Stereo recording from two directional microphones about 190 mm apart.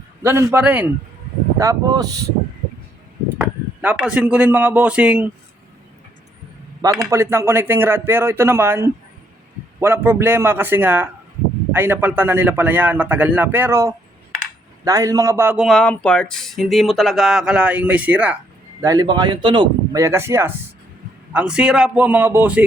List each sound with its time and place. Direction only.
0.2 s a man's voice: 15° right (ahead or behind)
1.5 s a man's voice: 20° right (ahead or behind)
3.4 s speech: 10° right (ahead or behind)
6.8 s a man's voice: 20° right (ahead or behind)
18.8 s a man's voice: 20° right (ahead or behind)